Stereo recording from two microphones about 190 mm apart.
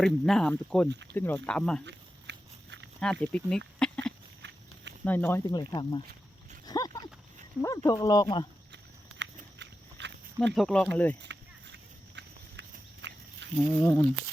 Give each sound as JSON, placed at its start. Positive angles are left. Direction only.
{"t": 0.0, "sound": "speech", "side_deg": 5}
{"t": 1.8, "sound": "dog", "side_deg": -70}
{"t": 3.0, "sound": "speech", "side_deg": 5}
{"t": 3.8, "sound": "a sound", "side_deg": 5}
{"t": 4.4, "sound": "walk", "side_deg": -70}
{"t": 5.0, "sound": "speech", "side_deg": 10}
{"t": 6.7, "sound": "a sound", "side_deg": 20}
{"t": 7.6, "sound": "speech", "side_deg": 15}
{"t": 8.7, "sound": "walk", "side_deg": -65}
{"t": 10.5, "sound": "speech", "side_deg": 0}
{"t": 11.2, "sound": "horse", "side_deg": -65}
{"t": 13.6, "sound": "speech", "side_deg": 10}